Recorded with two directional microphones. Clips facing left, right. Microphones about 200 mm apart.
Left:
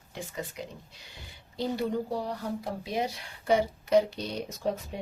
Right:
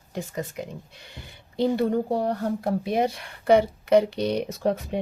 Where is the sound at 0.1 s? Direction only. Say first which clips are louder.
Right 6 dB; 50° right (ahead or behind).